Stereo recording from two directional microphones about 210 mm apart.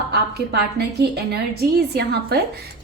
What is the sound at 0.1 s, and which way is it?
A woman's voice, 50° right (ahead or behind).